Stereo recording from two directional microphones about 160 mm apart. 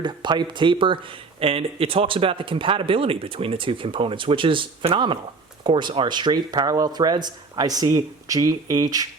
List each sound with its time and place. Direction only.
0.0 s speech: 30° right (ahead or behind)